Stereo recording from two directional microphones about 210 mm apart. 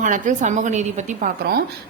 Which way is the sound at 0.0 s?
35° right (ahead or behind).